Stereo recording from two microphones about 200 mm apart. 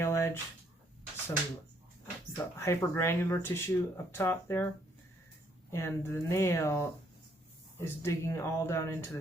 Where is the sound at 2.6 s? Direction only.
15° left (ahead or behind).